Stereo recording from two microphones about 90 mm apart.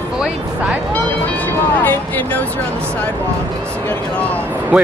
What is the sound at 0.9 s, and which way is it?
Speech, 20° left (ahead or behind).